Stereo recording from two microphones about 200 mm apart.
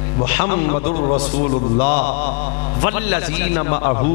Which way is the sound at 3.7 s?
35° left (ahead or behind).